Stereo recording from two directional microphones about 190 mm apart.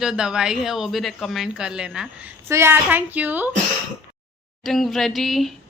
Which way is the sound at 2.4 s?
15° right (ahead or behind).